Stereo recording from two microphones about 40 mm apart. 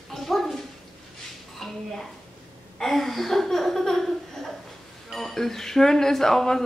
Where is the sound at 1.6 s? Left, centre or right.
Centre.